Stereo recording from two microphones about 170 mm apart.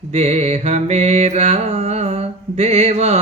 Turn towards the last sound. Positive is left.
turn(degrees=-40)  # may be behind; listen again after turning